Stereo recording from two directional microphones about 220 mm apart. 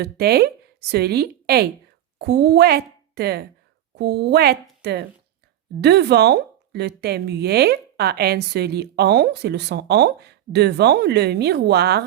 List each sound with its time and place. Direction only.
0.0 s a woman's voice: 45° right (ahead or behind)